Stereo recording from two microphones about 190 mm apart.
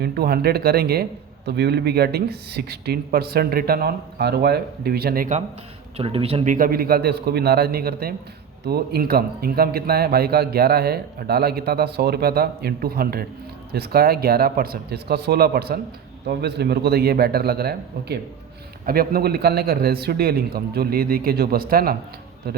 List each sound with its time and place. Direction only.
0.0 s a man's voice: 55° right (ahead or behind)
6.0 s a man's voice: 30° right (ahead or behind); by 21.9 s 50° right (ahead or behind)